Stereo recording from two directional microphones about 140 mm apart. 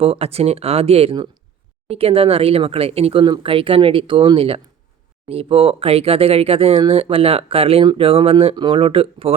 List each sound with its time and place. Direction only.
0.0 s speech: 45° right (ahead or behind)